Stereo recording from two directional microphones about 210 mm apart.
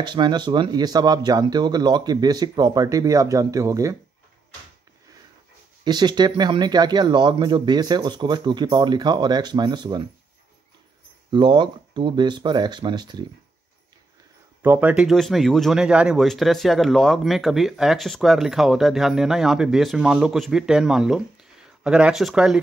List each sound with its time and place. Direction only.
0.0 s speech: 20° right (ahead or behind)
5.9 s speech: 20° right (ahead or behind)
11.2 s speech: 20° right (ahead or behind)
14.6 s speech: 10° right (ahead or behind)